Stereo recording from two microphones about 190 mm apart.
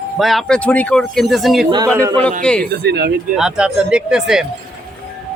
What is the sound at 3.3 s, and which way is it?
Speech, 5° right (ahead or behind).